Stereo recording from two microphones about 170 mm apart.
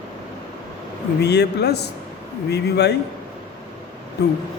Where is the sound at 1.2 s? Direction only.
75° left (ahead or behind).